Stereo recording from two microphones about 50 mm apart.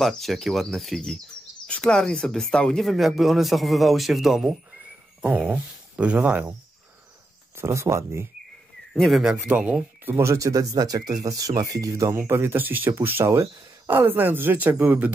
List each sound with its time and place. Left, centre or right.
0.0 s a man's voice: centre
2.8 s a man's voice: centre
5.2 s speech: right
7.5 s speech: right
8.9 s speech: centre
9.5 s speech: right
10.1 s speech: right
11.2 s speech: right
12.2 s speech: right
13.2 s speech: right
13.8 s speech: right